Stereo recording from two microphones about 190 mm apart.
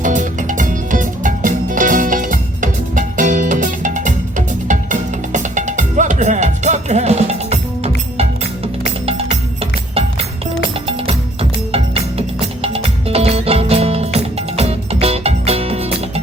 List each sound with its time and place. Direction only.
0.0 s music: 40° right (ahead or behind)
9.0 s music: 30° right (ahead or behind)
11.7 s music: 30° right (ahead or behind)